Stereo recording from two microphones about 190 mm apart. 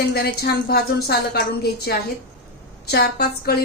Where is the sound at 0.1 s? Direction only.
55° left (ahead or behind).